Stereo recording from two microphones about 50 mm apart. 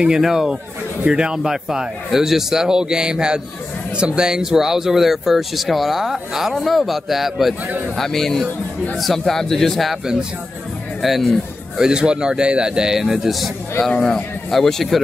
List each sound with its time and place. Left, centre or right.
0.0 s speech: centre
6.5 s speech: centre
11.0 s speech: centre
11.8 s speech: centre
13.9 s a man's voice: centre
14.5 s speech: centre